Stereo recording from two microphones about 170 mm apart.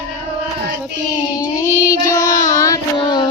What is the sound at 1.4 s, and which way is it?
Child singing, 15° left (ahead or behind).